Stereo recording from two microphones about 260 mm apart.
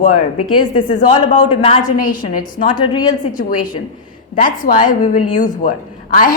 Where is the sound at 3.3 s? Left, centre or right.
Left.